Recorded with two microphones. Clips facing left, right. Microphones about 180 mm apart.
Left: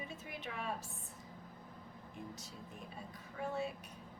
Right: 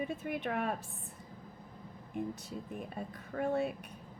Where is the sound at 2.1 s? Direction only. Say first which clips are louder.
Right 12 dB; 60° right (ahead or behind).